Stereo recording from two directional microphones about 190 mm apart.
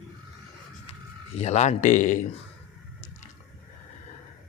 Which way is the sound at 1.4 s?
35° left (ahead or behind).